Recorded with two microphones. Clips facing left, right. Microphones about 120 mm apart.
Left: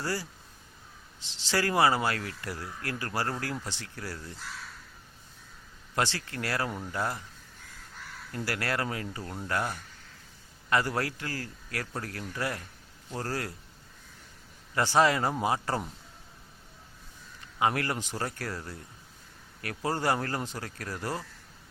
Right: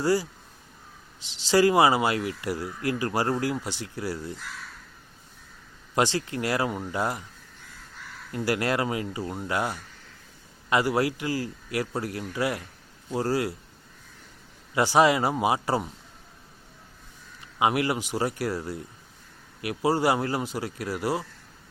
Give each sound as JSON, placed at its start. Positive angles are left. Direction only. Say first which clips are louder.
{"t": 0.0, "sound": "speech", "louder": "right 9 dB", "side_deg": -15}
{"t": 1.5, "sound": "speech", "louder": "right 6 dB", "side_deg": -15}
{"t": 5.9, "sound": "speech", "louder": "right 6 dB", "side_deg": -15}
{"t": 8.3, "sound": "speech", "louder": "right 7 dB", "side_deg": -20}
{"t": 14.8, "sound": "speech", "louder": "right 4 dB", "side_deg": -15}
{"t": 17.6, "sound": "speech", "louder": "right 4 dB", "side_deg": -15}